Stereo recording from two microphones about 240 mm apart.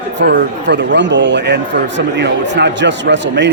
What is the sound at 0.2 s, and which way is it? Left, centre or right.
A man's voice, right.